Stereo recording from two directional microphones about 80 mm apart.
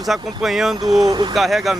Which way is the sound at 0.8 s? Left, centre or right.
Right.